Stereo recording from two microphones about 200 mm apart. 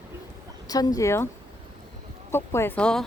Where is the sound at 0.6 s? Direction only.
20° left (ahead or behind).